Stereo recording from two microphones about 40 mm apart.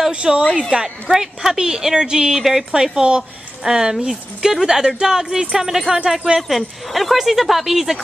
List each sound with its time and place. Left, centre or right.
0.1 s speech: right
0.6 s a woman's voice: centre
6.5 s speech: centre